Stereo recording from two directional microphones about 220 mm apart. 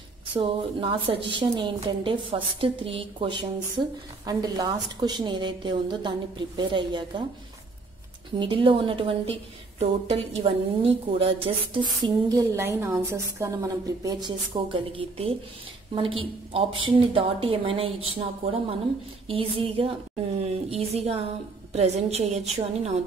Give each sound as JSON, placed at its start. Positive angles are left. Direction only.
{"t": 0.3, "sound": "a woman's voice", "side_deg": -20}
{"t": 8.4, "sound": "a woman's voice", "side_deg": -20}